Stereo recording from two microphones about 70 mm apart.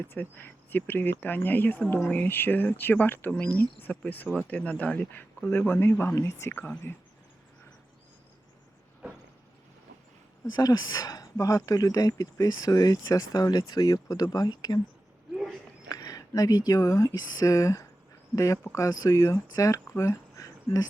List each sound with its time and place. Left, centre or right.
0.0 s speech: left
6.1 s speech: left
6.6 s speech: left
10.5 s speech: left
15.9 s speech: left
17.2 s speech: left